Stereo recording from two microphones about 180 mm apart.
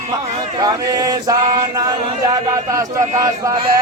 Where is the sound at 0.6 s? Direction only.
20° right (ahead or behind).